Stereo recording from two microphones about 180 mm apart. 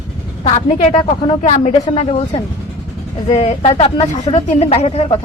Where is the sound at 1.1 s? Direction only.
20° left (ahead or behind).